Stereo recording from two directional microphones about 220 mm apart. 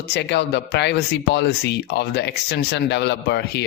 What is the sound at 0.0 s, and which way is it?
Speech, 50° left (ahead or behind).